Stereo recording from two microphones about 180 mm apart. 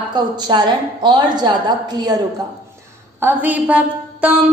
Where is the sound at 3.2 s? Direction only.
10° right (ahead or behind).